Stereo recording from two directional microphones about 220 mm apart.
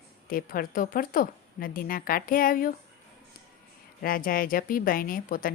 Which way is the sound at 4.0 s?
40° left (ahead or behind).